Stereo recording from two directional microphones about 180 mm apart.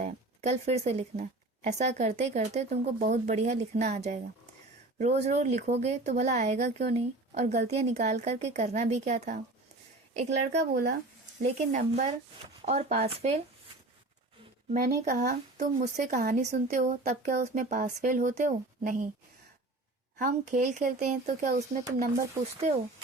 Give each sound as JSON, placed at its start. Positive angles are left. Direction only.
{"t": 0.0, "sound": "speech", "side_deg": -35}
{"t": 10.2, "sound": "a woman's voice", "side_deg": -70}
{"t": 11.7, "sound": "speech", "side_deg": -40}
{"t": 14.7, "sound": "speech", "side_deg": -50}
{"t": 20.1, "sound": "speech", "side_deg": -45}
{"t": 21.7, "sound": "speech", "side_deg": -90}